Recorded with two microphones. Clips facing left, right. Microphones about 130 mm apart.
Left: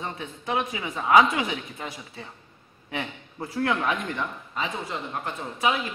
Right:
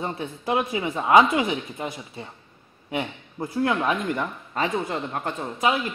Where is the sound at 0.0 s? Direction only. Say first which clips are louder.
Right 5 dB; 35° right (ahead or behind).